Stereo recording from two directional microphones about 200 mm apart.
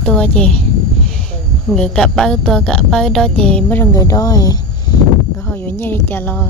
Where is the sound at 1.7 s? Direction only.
5° left (ahead or behind).